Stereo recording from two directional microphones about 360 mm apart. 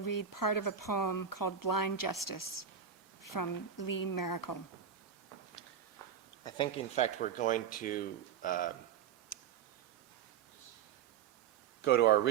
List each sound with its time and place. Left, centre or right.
0.0 s speech: left
6.4 s speech: centre
9.3 s a sound: left
11.8 s speech: left